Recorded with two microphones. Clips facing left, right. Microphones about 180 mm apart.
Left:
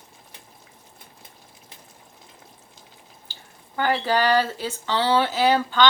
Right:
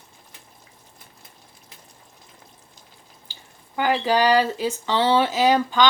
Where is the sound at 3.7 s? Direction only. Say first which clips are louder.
Right 2 dB; 15° right (ahead or behind).